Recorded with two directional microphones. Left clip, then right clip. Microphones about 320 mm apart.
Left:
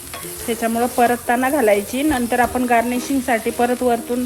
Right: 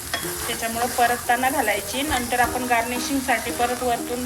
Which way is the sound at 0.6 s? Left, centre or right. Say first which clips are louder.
Left 4 dB; centre.